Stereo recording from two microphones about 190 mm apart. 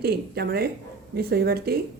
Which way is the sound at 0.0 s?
55° right (ahead or behind).